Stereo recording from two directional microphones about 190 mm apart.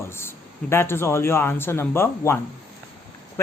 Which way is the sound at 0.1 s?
10° left (ahead or behind).